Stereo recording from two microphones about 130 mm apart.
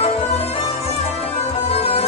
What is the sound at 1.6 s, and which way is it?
Music, 50° left (ahead or behind).